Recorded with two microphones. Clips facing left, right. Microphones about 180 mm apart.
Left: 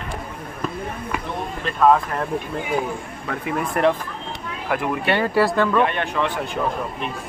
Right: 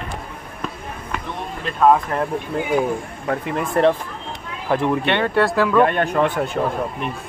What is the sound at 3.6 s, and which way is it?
Speech, 25° right (ahead or behind).